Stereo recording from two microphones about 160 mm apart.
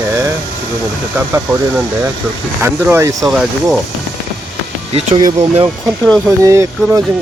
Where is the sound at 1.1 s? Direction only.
15° right (ahead or behind).